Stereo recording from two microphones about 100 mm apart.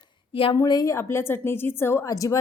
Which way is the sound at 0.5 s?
40° left (ahead or behind).